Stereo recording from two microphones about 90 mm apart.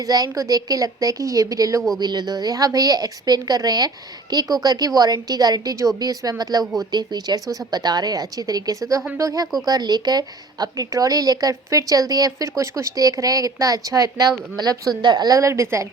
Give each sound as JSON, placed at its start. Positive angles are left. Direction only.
{"t": 0.0, "sound": "a woman's voice", "side_deg": -40}
{"t": 2.0, "sound": "a woman's voice", "side_deg": -50}